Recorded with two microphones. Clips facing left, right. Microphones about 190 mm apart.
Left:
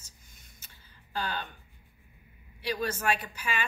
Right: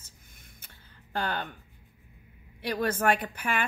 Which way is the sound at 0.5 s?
55° right (ahead or behind).